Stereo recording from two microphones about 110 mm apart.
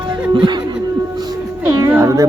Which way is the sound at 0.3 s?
45° right (ahead or behind).